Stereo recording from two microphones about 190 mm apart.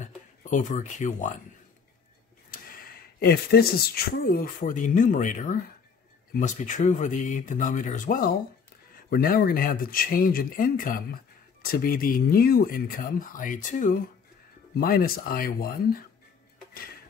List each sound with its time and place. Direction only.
0.0 s speech: 40° left (ahead or behind)
2.5 s speech: 50° left (ahead or behind)